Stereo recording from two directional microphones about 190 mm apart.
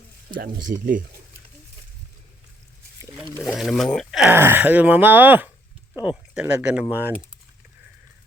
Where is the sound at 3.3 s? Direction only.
Centre (ahead or behind).